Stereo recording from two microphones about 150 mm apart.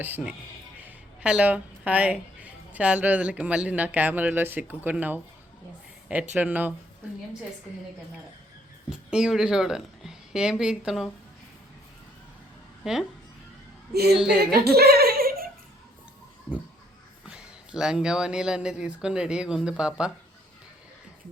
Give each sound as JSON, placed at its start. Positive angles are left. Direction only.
{"t": 0.8, "sound": "speech", "side_deg": -10}
{"t": 6.3, "sound": "speech", "side_deg": -10}
{"t": 8.9, "sound": "speech", "side_deg": -5}
{"t": 12.8, "sound": "speech", "side_deg": -5}
{"t": 14.1, "sound": "speech", "side_deg": -5}
{"t": 14.5, "sound": "a sound", "side_deg": -90}
{"t": 17.2, "sound": "speech", "side_deg": -5}